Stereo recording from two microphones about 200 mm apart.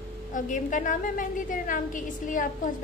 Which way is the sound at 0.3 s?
40° left (ahead or behind).